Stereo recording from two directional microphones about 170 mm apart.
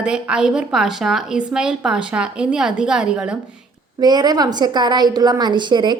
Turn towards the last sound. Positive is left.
turn(degrees=-25)  # may be behind; listen again after turning